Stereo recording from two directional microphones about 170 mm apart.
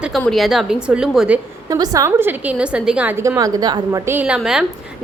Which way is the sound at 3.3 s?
20° right (ahead or behind).